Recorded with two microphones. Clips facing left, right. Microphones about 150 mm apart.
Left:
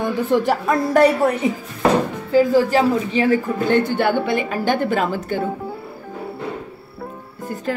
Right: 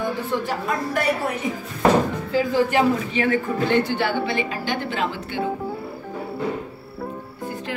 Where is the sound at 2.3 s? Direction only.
35° left (ahead or behind).